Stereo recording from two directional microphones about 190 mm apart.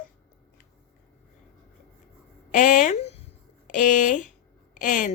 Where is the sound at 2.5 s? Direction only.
40° left (ahead or behind).